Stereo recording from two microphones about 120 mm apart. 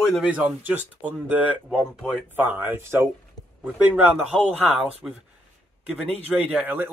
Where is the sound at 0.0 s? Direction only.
Centre (ahead or behind).